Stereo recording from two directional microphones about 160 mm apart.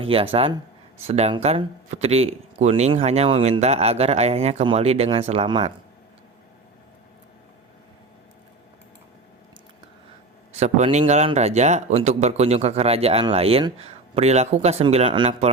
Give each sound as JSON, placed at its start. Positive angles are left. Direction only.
{"t": 0.0, "sound": "speech", "side_deg": -35}
{"t": 10.5, "sound": "a man's voice", "side_deg": -40}